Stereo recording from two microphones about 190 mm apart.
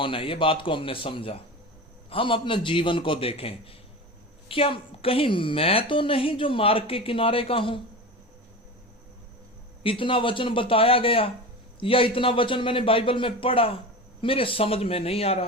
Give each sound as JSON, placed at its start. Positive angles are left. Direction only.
{"t": 0.0, "sound": "a woman's voice", "side_deg": 30}
{"t": 9.8, "sound": "a woman's voice", "side_deg": 30}